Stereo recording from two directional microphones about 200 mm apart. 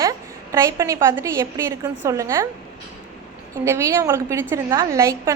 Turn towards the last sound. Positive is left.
turn(degrees=-15)  # may be behind; listen again after turning